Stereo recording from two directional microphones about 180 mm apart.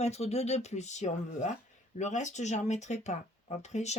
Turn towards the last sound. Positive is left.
turn(degrees=40)  # may be behind; listen again after turning